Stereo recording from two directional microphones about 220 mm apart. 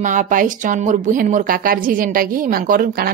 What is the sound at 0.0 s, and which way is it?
A woman's voice, 35° right (ahead or behind).